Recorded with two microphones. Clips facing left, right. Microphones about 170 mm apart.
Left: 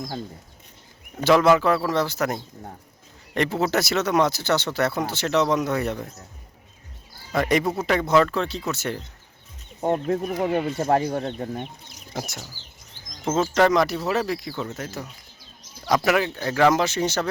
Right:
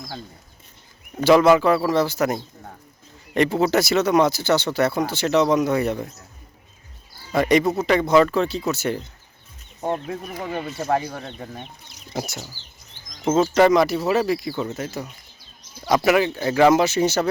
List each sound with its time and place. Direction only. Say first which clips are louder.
1.2 s speech: right 3 dB; centre (ahead or behind)
7.3 s speech: right 4 dB; 5° left (ahead or behind)
9.9 s speech: left 5 dB; 45° left (ahead or behind)
12.1 s speech: right 3 dB; 5° right (ahead or behind)